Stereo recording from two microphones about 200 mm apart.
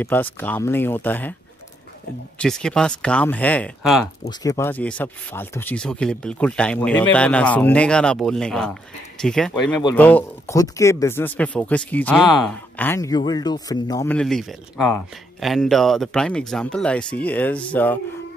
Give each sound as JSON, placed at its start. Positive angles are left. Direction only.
{"t": 0.0, "sound": "speech", "side_deg": 10}
{"t": 2.3, "sound": "speech", "side_deg": 5}
{"t": 4.3, "sound": "a man's voice", "side_deg": 20}
{"t": 14.0, "sound": "speech", "side_deg": 5}